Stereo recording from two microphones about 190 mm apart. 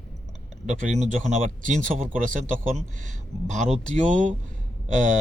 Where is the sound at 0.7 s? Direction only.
40° right (ahead or behind).